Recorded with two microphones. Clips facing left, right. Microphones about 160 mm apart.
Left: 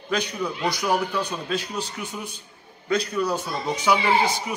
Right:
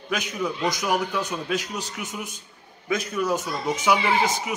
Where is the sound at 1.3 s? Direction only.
15° right (ahead or behind).